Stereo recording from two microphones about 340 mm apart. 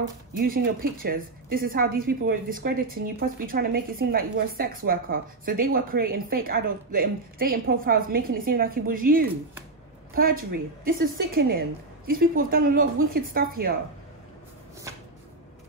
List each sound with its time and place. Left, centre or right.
0.4 s a woman's voice: right